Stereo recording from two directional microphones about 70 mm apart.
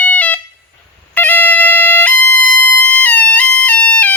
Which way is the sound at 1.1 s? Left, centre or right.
Left.